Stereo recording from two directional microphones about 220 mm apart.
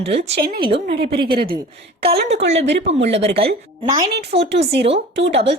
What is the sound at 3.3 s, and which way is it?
A woman's voice, 25° right (ahead or behind).